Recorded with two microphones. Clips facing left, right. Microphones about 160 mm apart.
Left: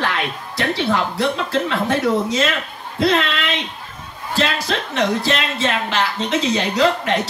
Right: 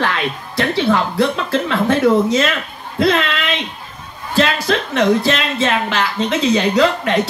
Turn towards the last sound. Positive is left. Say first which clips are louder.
# right 2 dB
turn(degrees=-60)  # may be behind; listen again after turning